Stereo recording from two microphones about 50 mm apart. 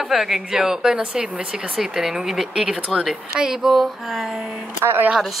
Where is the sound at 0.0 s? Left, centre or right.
Centre.